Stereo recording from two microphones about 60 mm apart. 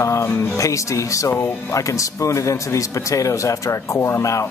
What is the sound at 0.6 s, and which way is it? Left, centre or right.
Speech, left.